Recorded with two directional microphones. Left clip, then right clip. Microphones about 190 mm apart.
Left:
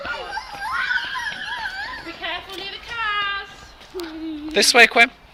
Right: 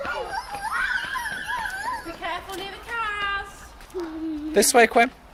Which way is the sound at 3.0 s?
45° right (ahead or behind).